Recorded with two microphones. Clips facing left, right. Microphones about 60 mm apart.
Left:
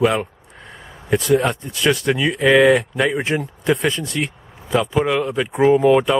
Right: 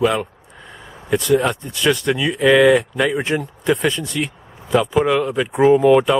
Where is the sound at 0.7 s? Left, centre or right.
Centre.